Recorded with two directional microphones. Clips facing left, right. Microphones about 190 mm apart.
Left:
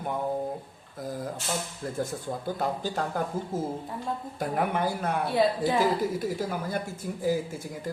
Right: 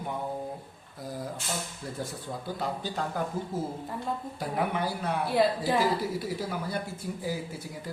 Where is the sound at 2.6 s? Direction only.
45° left (ahead or behind).